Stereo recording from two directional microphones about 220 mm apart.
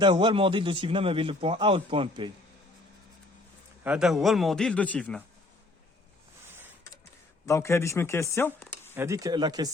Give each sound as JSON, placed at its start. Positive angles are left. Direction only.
{"t": 0.0, "sound": "a man's voice", "side_deg": -20}
{"t": 3.8, "sound": "a man's voice", "side_deg": -5}
{"t": 7.4, "sound": "speech", "side_deg": 10}
{"t": 9.0, "sound": "speech", "side_deg": -15}